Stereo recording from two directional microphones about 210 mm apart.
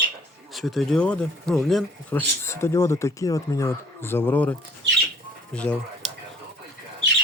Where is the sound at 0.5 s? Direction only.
Centre (ahead or behind).